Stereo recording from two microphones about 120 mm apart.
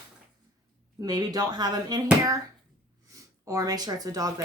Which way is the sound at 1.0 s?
35° right (ahead or behind).